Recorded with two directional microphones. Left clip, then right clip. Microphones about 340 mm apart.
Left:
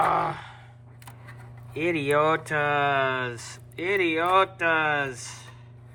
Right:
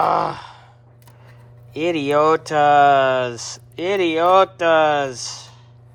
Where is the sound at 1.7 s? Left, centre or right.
Centre.